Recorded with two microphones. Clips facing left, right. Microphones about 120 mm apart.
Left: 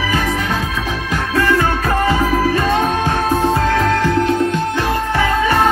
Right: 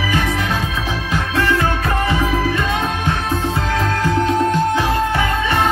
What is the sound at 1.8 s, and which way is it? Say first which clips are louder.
Music: left 3 dB; 35° left (ahead or behind).